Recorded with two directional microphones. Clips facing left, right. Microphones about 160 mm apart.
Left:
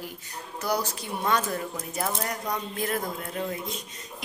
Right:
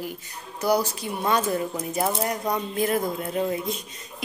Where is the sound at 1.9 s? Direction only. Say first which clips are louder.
Right 5 dB; 25° right (ahead or behind).